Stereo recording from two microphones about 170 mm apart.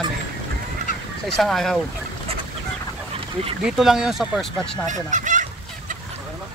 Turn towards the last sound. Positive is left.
turn(degrees=-45)  # may be behind; listen again after turning